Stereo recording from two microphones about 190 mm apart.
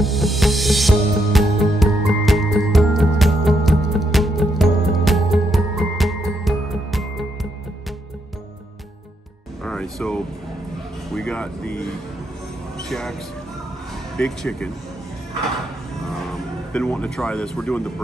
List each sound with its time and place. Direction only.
0.0 s music: centre (ahead or behind)
9.7 s vehicle: 5° left (ahead or behind)
11.1 s air conditioning: 5° left (ahead or behind)
12.8 s music: 5° left (ahead or behind)
14.1 s speech: 5° left (ahead or behind)
16.7 s speech: 5° left (ahead or behind)